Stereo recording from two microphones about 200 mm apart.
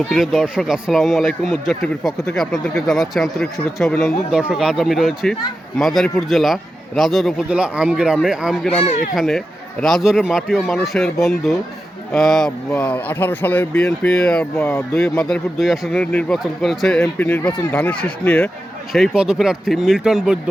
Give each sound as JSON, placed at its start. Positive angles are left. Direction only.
{"t": 0.1, "sound": "speech", "side_deg": 0}